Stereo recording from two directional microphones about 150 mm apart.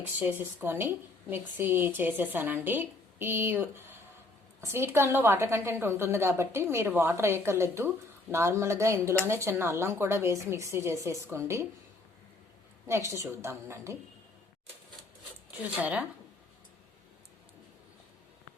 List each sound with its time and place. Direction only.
0.0 s a woman's voice: 10° right (ahead or behind)
12.9 s a woman's voice: 20° right (ahead or behind)
15.4 s speech: 10° right (ahead or behind)